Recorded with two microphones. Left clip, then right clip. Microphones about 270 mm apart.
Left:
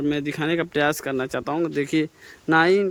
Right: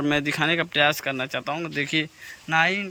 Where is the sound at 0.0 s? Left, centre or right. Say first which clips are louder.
Right 2 dB; centre.